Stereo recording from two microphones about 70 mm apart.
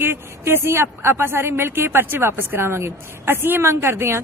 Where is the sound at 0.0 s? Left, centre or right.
Right.